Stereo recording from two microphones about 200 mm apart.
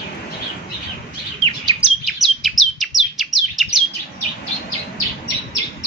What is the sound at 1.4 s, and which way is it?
Chirp, 25° right (ahead or behind).